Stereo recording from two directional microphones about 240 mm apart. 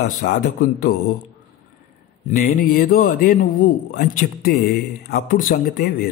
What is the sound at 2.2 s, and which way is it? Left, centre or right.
Speech, left.